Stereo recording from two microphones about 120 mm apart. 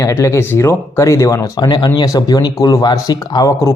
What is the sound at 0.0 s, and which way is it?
Speech, 20° left (ahead or behind).